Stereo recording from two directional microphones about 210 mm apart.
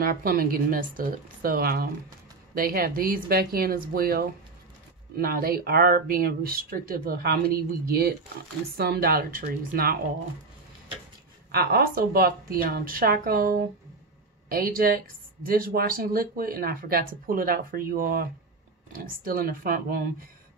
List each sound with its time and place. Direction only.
0.0 s speech: 45° right (ahead or behind)
11.5 s speech: 45° right (ahead or behind)